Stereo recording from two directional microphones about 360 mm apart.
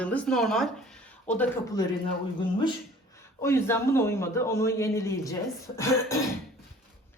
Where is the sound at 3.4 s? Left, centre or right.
Centre.